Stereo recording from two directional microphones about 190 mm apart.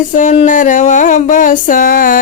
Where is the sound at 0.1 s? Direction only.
40° left (ahead or behind).